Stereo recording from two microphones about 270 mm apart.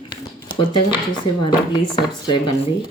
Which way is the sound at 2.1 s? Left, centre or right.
Centre.